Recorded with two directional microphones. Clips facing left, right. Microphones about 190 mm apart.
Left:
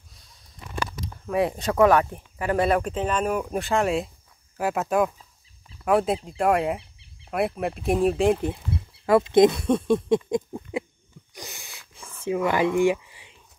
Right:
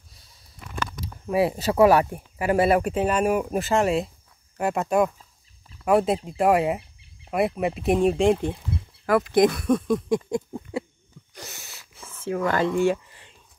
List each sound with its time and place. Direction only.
1.3 s speech: 5° right (ahead or behind)
9.0 s speech: 25° left (ahead or behind)
11.3 s a sound: 15° left (ahead or behind)